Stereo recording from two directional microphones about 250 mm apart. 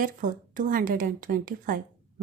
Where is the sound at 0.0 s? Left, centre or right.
Right.